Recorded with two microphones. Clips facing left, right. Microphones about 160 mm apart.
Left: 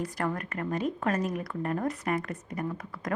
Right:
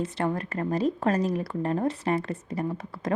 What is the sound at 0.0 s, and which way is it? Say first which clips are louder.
Speech: right 4 dB; 25° right (ahead or behind).